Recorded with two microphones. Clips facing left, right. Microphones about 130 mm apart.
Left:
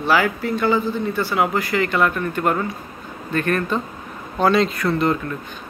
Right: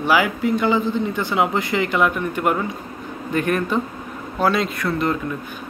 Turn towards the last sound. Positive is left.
turn(degrees=-5)  # may be behind; listen again after turning